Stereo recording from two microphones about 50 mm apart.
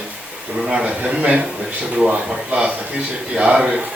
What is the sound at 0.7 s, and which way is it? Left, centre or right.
Speech, centre.